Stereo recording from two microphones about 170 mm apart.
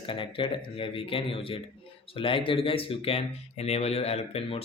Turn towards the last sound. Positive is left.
turn(degrees=35)  # may be behind; listen again after turning